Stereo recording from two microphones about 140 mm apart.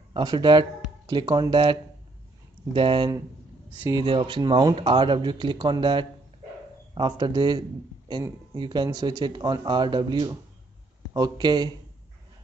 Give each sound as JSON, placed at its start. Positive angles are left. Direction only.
{"t": 0.1, "sound": "speech", "side_deg": -35}